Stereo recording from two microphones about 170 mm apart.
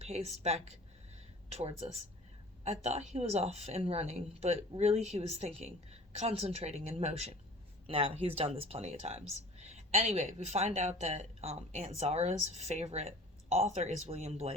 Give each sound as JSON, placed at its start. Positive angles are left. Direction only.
{"t": 0.0, "sound": "speech", "side_deg": -40}